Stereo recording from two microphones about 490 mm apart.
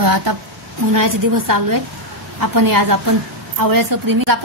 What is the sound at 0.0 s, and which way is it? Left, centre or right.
A woman's voice, right.